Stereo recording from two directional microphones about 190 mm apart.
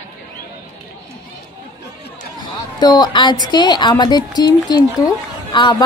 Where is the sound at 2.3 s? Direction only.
20° left (ahead or behind).